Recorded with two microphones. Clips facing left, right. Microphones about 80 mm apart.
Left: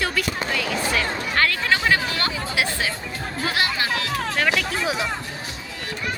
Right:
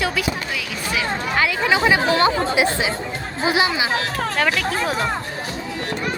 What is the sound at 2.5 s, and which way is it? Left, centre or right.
Speech, right.